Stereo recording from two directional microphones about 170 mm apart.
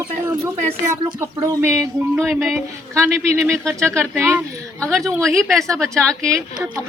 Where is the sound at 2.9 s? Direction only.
15° right (ahead or behind).